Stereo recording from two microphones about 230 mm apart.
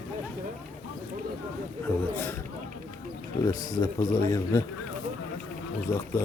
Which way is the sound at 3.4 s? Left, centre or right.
Centre.